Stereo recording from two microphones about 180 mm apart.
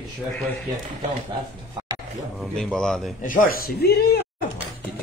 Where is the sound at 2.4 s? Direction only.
5° left (ahead or behind).